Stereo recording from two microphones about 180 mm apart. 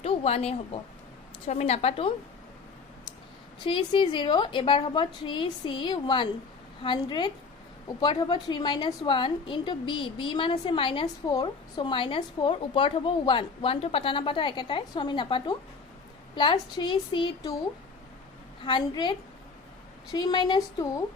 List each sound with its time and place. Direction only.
0.0 s a sound: 35° left (ahead or behind)
1.5 s a woman's voice: 35° left (ahead or behind)
3.6 s a woman's voice: 25° left (ahead or behind)
18.6 s a woman's voice: 25° left (ahead or behind)
20.1 s a woman's voice: 25° left (ahead or behind)